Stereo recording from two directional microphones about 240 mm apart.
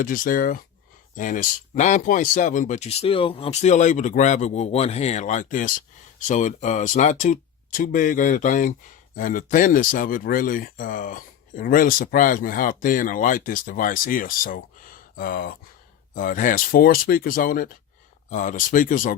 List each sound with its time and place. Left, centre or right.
0.0 s speech: left